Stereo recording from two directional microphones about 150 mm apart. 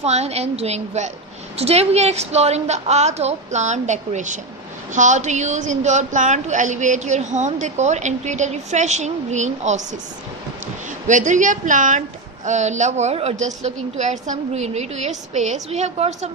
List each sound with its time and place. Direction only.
0.0 s a woman's voice: 45° right (ahead or behind)
11.0 s a woman's voice: 55° right (ahead or behind)